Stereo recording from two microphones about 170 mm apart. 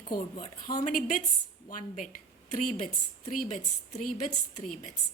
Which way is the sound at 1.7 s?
50° left (ahead or behind).